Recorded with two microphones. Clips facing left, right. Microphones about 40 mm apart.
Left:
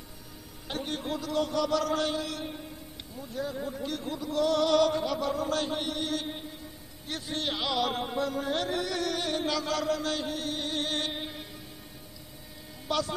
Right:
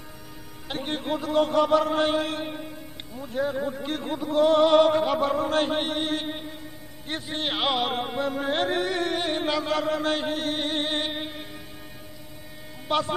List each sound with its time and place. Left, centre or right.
0.7 s music: right
7.1 s a man's voice: right
7.5 s music: right
12.8 s a sound: right